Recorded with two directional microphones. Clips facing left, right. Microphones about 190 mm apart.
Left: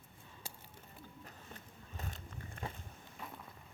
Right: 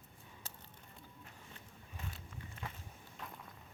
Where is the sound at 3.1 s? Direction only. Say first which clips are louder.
Left 1 dB; 5° left (ahead or behind).